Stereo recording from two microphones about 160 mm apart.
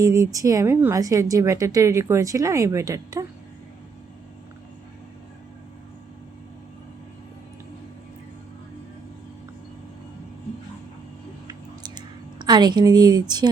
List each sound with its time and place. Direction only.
0.0 s a woman's voice: 20° right (ahead or behind)
11.4 s clicking: 25° right (ahead or behind)